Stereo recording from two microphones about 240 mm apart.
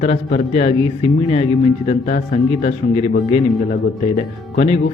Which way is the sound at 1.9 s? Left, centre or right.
Left.